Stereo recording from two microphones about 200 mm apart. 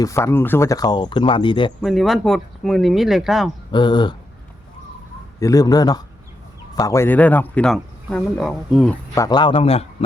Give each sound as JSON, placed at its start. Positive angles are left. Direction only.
{"t": 0.0, "sound": "speech", "side_deg": 15}
{"t": 1.8, "sound": "speech", "side_deg": 0}
{"t": 3.7, "sound": "speech", "side_deg": 25}
{"t": 5.4, "sound": "a man's voice", "side_deg": 15}
{"t": 9.1, "sound": "speech", "side_deg": 20}